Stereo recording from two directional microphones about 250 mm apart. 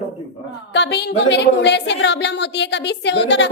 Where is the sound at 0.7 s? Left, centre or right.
Left.